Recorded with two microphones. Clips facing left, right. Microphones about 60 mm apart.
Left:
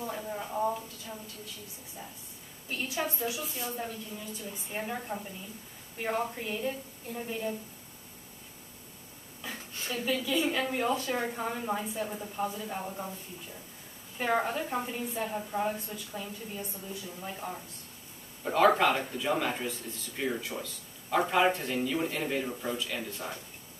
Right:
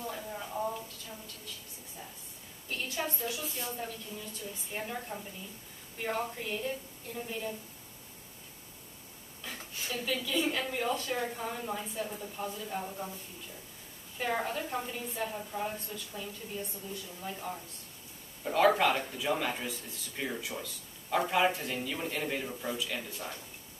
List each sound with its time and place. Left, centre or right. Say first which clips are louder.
0.0 s a sound: left 3 dB; centre
2.7 s a woman's voice: left 2 dB; centre
9.4 s a woman's voice: left 2 dB; centre
14.1 s a woman's voice: left 4 dB; centre